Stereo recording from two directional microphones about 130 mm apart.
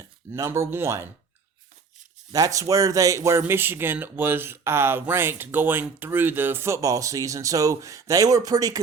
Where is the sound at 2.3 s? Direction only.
25° right (ahead or behind).